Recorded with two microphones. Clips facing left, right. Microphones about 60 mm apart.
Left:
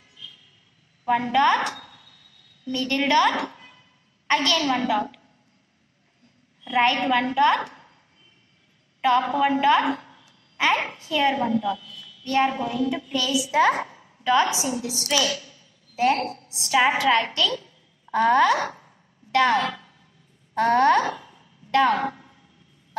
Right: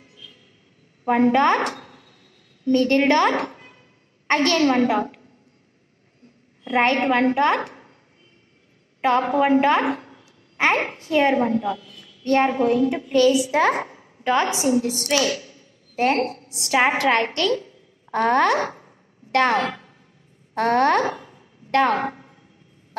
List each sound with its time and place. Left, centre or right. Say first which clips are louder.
0.1 s vehicle: left 4 dB; right
1.0 s a sound: right 3 dB; right
4.3 s a woman's voice: right 4 dB; right
6.6 s a woman's voice: right 2 dB; right
9.0 s a woman's voice: right 1 dB; right
20.5 s a sound: even; right